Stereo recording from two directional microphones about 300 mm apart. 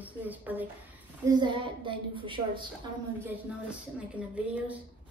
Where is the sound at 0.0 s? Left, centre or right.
Centre.